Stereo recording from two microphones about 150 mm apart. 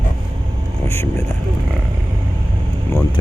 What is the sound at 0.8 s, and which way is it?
Speech, 15° left (ahead or behind).